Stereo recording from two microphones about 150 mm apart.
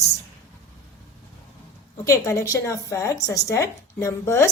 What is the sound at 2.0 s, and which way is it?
A woman's voice, 20° left (ahead or behind).